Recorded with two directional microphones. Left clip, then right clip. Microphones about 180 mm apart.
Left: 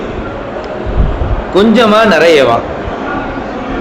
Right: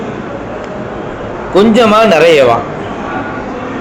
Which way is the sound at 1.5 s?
15° right (ahead or behind).